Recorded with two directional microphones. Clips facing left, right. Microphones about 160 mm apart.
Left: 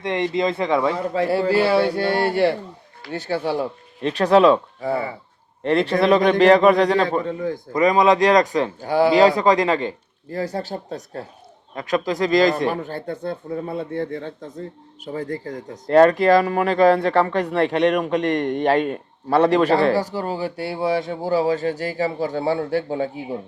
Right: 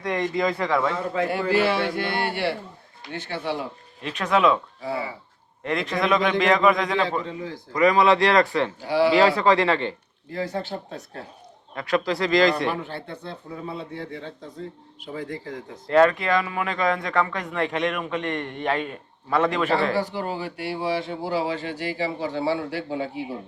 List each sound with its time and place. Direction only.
0.0 s speech: 25° left (ahead or behind)
4.8 s a man's voice: 50° left (ahead or behind)
5.6 s a man's voice: 30° left (ahead or behind); by 7.6 s 50° left (ahead or behind)
7.7 s speech: 20° left (ahead or behind)
8.8 s a man's voice: 45° left (ahead or behind)
9.2 s speech: 15° left (ahead or behind)
10.3 s speech: 40° left (ahead or behind)
11.7 s speech: 20° left (ahead or behind)
12.5 s a man's voice: 45° left (ahead or behind)